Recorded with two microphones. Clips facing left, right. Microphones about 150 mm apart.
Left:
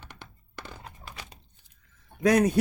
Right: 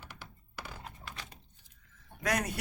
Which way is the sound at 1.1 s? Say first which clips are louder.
Left 4 dB; 15° left (ahead or behind).